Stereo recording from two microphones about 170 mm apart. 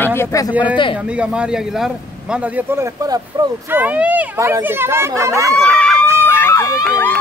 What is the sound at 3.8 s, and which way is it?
Speech, 10° right (ahead or behind).